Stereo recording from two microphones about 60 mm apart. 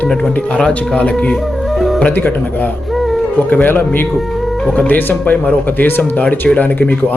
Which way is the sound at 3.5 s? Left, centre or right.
Left.